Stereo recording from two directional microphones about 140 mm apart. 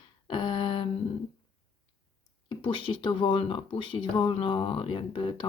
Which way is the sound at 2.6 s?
35° left (ahead or behind).